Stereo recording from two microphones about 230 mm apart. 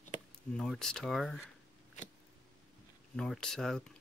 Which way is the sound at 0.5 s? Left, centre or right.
Centre.